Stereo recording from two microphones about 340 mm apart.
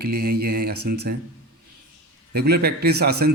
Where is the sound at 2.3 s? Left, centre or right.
Right.